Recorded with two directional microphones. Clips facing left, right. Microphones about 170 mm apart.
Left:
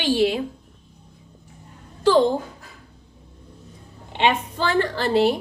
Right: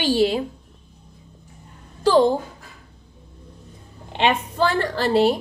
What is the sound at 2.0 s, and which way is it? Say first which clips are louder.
Speech: right 1 dB; 35° right (ahead or behind).